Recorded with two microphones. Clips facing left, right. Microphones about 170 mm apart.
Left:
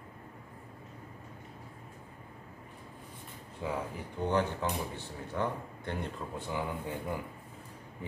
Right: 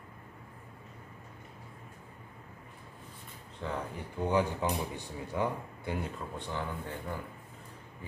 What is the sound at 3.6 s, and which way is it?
Speech, 5° left (ahead or behind).